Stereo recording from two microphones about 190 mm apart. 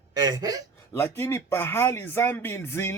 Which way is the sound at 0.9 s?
15° left (ahead or behind).